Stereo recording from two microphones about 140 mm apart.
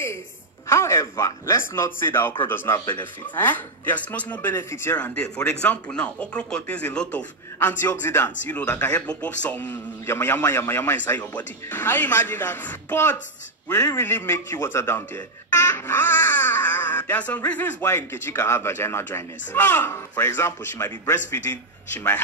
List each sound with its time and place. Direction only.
0.7 s a man's voice: 20° left (ahead or behind)